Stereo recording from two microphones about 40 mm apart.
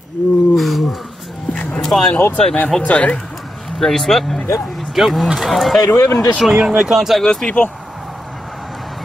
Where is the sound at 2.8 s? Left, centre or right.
Left.